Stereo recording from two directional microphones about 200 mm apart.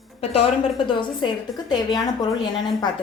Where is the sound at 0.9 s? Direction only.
25° left (ahead or behind).